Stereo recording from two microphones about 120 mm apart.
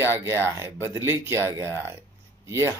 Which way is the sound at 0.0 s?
20° right (ahead or behind).